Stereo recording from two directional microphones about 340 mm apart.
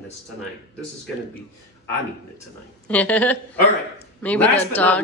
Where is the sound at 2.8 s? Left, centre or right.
Centre.